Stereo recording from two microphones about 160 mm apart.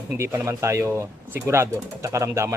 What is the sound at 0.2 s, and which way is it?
Speech, 15° right (ahead or behind).